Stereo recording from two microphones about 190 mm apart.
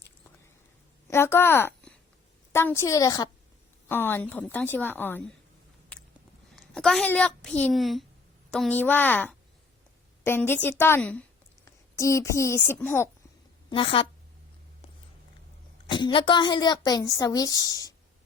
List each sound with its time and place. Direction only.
1.0 s a woman's voice: 15° left (ahead or behind)
5.9 s a sound: 5° left (ahead or behind)
6.6 s a woman's voice: centre (ahead or behind)
13.7 s a woman's voice: 30° left (ahead or behind)
15.9 s a woman's voice: 25° left (ahead or behind)